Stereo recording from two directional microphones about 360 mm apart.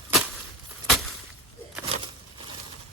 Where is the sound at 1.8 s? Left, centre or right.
Centre.